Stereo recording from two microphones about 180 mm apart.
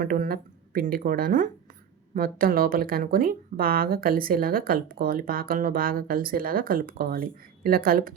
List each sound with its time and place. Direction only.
0.0 s speech: 50° right (ahead or behind)